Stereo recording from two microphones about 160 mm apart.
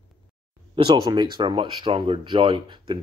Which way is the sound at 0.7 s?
30° right (ahead or behind).